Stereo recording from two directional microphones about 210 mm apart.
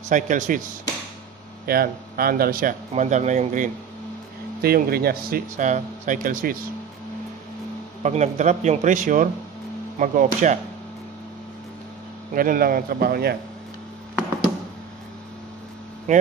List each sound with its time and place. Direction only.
0.1 s speech: 35° right (ahead or behind)
1.7 s speech: 45° right (ahead or behind)
8.0 s speech: 35° right (ahead or behind)
12.4 s speech: 45° right (ahead or behind)
16.1 s speech: 35° right (ahead or behind)